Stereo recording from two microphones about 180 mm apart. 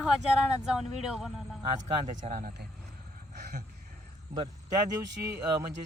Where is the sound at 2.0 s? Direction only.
45° right (ahead or behind).